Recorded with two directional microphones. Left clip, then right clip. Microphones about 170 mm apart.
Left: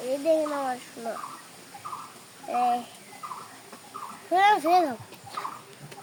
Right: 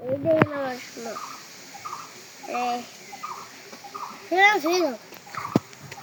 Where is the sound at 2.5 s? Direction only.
30° left (ahead or behind).